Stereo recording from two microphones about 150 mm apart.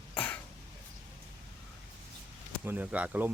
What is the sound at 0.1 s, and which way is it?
Throat clearing, 10° left (ahead or behind).